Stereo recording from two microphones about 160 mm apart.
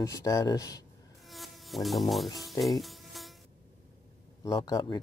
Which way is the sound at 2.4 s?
Centre (ahead or behind).